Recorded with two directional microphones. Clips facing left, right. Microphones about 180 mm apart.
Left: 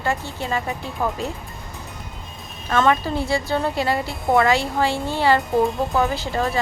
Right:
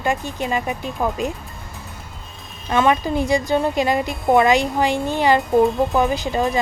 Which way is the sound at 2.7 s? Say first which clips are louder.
Right 1 dB; 15° right (ahead or behind).